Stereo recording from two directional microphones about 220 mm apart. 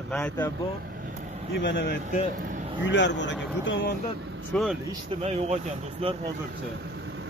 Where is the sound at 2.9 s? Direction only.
55° left (ahead or behind).